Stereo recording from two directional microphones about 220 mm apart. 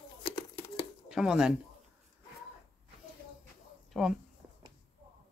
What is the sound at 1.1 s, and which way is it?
Speech, 5° right (ahead or behind).